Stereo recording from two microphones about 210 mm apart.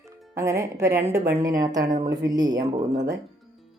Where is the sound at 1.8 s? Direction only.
35° right (ahead or behind).